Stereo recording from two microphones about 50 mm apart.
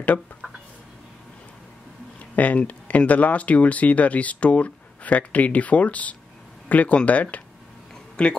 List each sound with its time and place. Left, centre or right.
2.3 s speech: left